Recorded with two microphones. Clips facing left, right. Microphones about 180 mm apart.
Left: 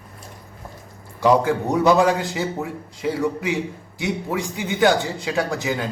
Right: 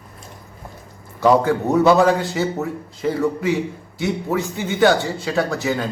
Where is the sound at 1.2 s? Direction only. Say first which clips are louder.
Right 2 dB; 15° left (ahead or behind).